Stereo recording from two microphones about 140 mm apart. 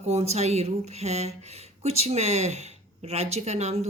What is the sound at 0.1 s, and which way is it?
A woman's voice, 50° right (ahead or behind).